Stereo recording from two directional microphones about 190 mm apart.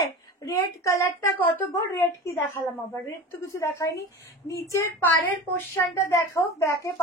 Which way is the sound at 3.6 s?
15° left (ahead or behind).